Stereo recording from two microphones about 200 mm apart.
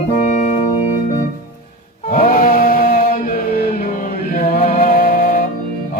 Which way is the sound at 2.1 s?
45° left (ahead or behind).